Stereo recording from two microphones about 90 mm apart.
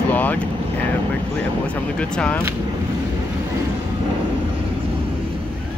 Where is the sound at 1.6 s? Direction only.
15° left (ahead or behind).